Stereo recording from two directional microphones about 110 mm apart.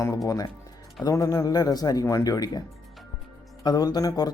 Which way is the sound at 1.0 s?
30° left (ahead or behind).